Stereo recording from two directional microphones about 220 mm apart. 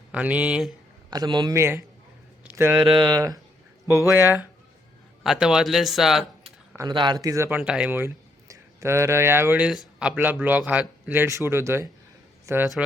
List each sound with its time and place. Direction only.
0.1 s speech: 5° right (ahead or behind)
1.1 s speech: 20° right (ahead or behind)
2.4 s a sound: 10° right (ahead or behind)
2.8 s speech: 20° right (ahead or behind); by 6.2 s centre (ahead or behind)
6.7 s speech: 20° right (ahead or behind)